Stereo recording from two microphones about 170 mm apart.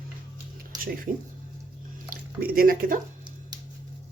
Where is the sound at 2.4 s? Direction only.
60° right (ahead or behind).